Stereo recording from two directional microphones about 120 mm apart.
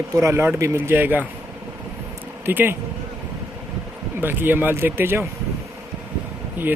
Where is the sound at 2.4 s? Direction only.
15° right (ahead or behind).